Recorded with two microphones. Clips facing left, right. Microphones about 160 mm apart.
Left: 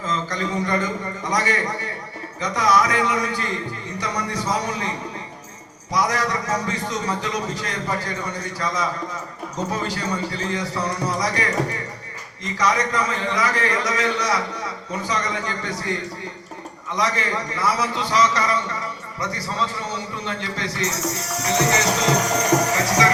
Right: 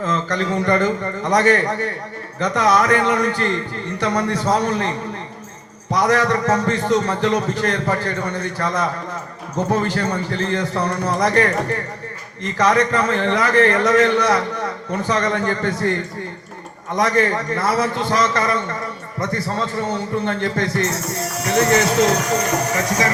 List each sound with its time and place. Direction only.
0.0 s a man's voice: 65° right (ahead or behind)